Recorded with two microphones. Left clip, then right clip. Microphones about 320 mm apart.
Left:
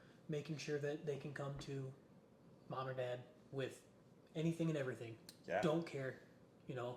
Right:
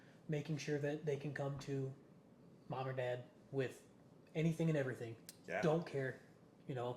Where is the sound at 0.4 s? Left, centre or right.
Right.